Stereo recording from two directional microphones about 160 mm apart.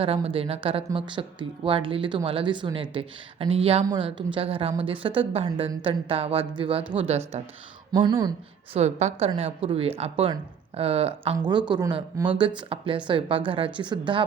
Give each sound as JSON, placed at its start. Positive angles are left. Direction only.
{"t": 0.0, "sound": "speech", "side_deg": -35}
{"t": 7.9, "sound": "speech", "side_deg": -25}
{"t": 8.7, "sound": "speech", "side_deg": -45}